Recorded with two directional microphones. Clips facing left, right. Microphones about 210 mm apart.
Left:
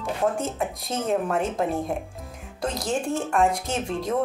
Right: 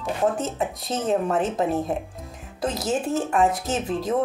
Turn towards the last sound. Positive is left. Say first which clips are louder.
# right 2 dB
turn(degrees=0)  # may be behind; listen again after turning